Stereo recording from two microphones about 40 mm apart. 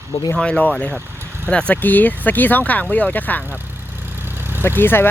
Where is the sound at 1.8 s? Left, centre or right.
Left.